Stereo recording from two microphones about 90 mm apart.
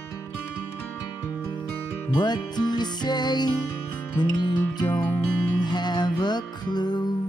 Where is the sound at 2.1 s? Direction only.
55° left (ahead or behind).